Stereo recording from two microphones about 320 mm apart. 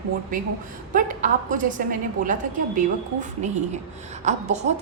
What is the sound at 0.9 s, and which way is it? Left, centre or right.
A woman's voice, right.